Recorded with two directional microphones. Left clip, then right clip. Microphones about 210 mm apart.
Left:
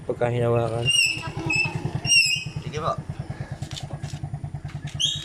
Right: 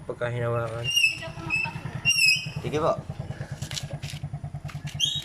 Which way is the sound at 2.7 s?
35° right (ahead or behind).